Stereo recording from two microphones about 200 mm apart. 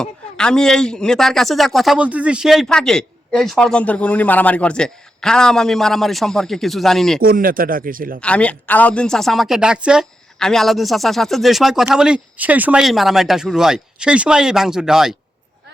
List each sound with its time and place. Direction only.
0.0 s speech: 5° left (ahead or behind)
7.2 s speech: 45° right (ahead or behind)
8.2 s speech: 5° left (ahead or behind)